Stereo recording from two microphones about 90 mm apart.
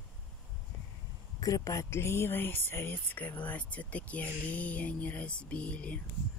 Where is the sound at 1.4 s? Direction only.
40° left (ahead or behind); by 5.9 s 15° left (ahead or behind).